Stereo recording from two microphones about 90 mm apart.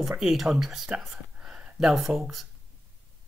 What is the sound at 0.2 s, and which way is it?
Speech, 5° right (ahead or behind).